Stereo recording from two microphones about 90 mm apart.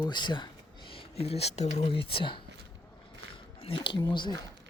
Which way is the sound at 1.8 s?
90° left.